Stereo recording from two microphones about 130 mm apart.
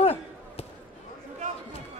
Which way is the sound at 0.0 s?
50° left (ahead or behind).